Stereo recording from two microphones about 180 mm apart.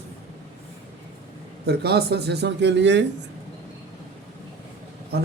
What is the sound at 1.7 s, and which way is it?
Speech, 65° right (ahead or behind).